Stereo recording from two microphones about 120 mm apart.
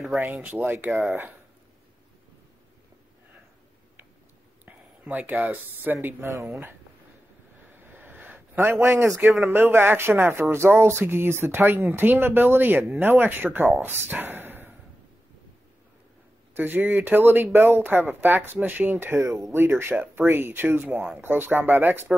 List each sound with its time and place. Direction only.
0.2 s speech: 15° right (ahead or behind)
4.6 s speech: 15° right (ahead or behind)
7.7 s a sound: 15° right (ahead or behind)
8.8 s speech: 20° right (ahead or behind)
16.5 s speech: 15° right (ahead or behind)